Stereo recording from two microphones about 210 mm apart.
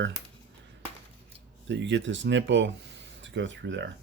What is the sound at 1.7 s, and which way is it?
Speech, 60° right (ahead or behind).